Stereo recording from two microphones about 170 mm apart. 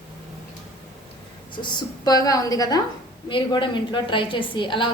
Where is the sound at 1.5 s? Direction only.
25° left (ahead or behind).